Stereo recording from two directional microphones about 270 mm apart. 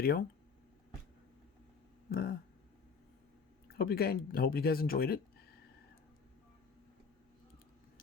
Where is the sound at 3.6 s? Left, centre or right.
Left.